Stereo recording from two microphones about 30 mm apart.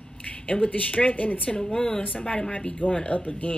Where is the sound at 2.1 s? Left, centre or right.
Left.